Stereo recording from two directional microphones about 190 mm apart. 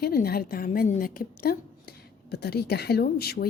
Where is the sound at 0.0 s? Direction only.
55° left (ahead or behind).